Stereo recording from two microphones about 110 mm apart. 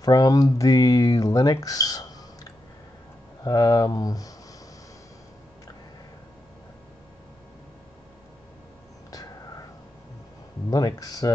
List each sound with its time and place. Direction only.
0.0 s speech: 35° left (ahead or behind)
3.4 s speech: 35° left (ahead or behind)
9.1 s whispering: 35° left (ahead or behind)
10.7 s speech: 35° left (ahead or behind)